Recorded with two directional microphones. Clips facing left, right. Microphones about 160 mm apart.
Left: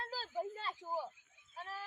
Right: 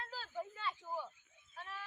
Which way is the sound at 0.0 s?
35° left (ahead or behind).